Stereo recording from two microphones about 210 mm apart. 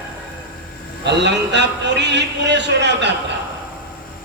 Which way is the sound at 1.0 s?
55° right (ahead or behind).